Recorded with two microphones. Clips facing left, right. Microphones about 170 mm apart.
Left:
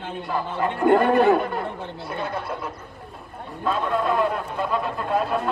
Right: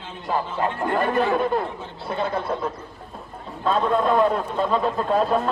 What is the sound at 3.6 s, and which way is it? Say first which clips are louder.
Speech: right 3 dB; 5° left (ahead or behind).